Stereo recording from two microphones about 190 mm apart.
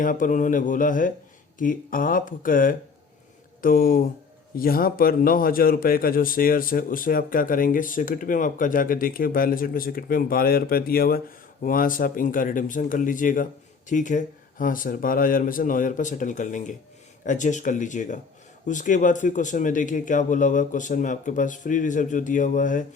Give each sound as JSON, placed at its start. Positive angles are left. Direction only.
{"t": 0.0, "sound": "a man's voice", "side_deg": 45}